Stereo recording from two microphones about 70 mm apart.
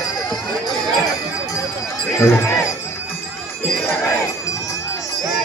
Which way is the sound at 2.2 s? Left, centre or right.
Left.